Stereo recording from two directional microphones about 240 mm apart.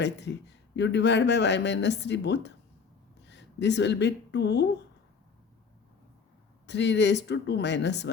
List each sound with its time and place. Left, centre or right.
0.0 s speech: left
6.7 s speech: left